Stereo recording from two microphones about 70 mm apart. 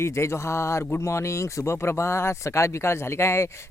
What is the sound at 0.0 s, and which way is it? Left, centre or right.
Speech, left.